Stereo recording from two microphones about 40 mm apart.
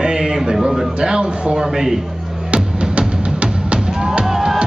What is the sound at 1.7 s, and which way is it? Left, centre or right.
Speech, centre.